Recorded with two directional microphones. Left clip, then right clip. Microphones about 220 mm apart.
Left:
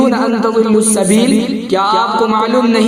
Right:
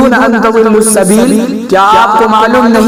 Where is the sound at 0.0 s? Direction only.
25° right (ahead or behind).